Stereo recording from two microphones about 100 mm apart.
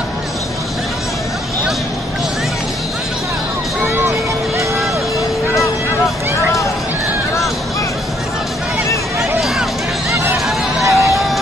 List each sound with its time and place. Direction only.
10.8 s music: 30° right (ahead or behind)